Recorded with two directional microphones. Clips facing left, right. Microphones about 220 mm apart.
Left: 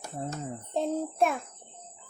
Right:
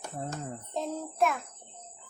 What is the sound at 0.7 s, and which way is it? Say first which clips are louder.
Speech: left 6 dB; 30° left (ahead or behind).